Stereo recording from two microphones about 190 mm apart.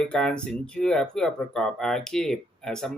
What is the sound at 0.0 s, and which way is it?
Speech, 5° left (ahead or behind).